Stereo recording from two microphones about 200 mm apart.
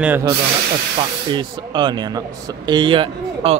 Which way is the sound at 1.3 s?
25° right (ahead or behind).